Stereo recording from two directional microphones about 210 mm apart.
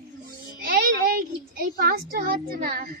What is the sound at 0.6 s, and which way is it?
A woman's voice, 45° right (ahead or behind).